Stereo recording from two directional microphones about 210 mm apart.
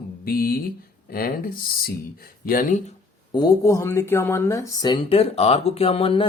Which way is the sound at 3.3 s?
15° left (ahead or behind).